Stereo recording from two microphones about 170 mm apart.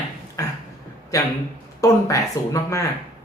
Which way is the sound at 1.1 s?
20° left (ahead or behind).